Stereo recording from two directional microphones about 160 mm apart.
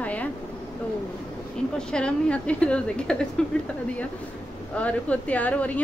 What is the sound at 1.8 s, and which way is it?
A woman's voice, 5° left (ahead or behind).